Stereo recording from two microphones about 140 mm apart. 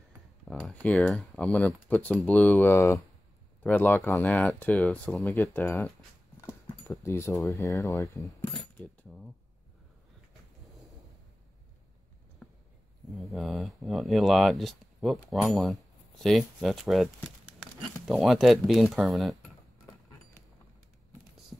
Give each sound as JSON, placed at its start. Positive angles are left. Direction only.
{"t": 0.5, "sound": "speech", "side_deg": 0}
{"t": 5.3, "sound": "speech", "side_deg": 20}
{"t": 6.4, "sound": "a sound", "side_deg": 20}
{"t": 7.5, "sound": "speech", "side_deg": 20}
{"t": 8.7, "sound": "coin", "side_deg": 5}
{"t": 13.1, "sound": "speech", "side_deg": 0}